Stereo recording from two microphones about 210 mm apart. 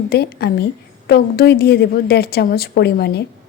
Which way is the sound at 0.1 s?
50° left (ahead or behind).